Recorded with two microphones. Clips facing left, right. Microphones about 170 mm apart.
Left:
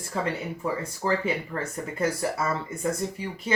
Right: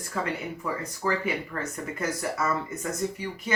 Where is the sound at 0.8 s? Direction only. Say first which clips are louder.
Left 1 dB; 30° left (ahead or behind).